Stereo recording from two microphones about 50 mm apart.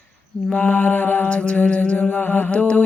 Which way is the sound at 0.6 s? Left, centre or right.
Left.